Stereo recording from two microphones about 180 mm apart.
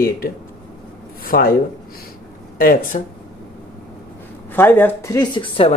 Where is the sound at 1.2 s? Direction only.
55° left (ahead or behind).